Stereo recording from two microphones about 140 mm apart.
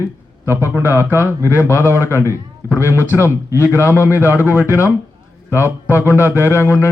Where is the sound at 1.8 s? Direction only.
15° right (ahead or behind).